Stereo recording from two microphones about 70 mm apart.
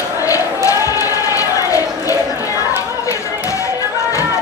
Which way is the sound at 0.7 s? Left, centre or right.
Left.